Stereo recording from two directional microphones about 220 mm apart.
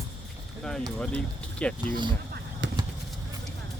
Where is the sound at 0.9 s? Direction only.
5° left (ahead or behind).